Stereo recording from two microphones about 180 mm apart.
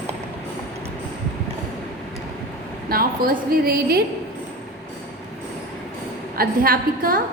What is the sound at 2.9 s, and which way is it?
A woman's voice, 55° right (ahead or behind).